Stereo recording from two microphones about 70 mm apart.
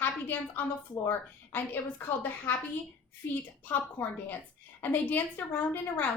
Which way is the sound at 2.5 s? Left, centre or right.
Left.